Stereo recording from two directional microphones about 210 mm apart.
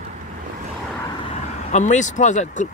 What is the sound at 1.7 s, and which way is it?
Speech, 35° left (ahead or behind).